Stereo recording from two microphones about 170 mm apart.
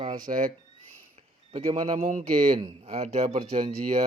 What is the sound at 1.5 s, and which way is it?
Speech, 25° right (ahead or behind).